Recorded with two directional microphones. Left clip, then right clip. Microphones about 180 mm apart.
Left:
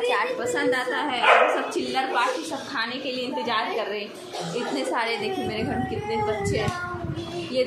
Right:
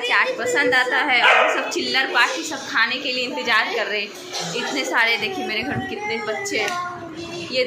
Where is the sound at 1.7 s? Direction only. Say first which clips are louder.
Right 5 dB; centre (ahead or behind); by 6.6 s 15° left (ahead or behind).